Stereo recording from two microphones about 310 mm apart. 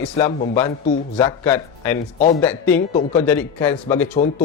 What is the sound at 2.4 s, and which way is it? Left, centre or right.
Speech, centre.